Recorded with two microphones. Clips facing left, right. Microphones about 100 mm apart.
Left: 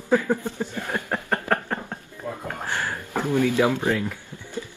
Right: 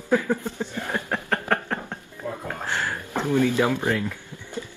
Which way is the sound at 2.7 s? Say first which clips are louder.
Right 1 dB; 15° left (ahead or behind).